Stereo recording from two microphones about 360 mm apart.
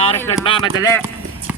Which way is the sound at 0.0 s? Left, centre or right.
Centre.